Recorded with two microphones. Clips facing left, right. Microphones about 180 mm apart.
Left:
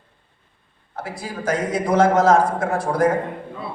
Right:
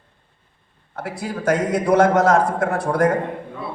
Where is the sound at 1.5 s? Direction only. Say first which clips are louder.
Right 3 dB; 55° right (ahead or behind).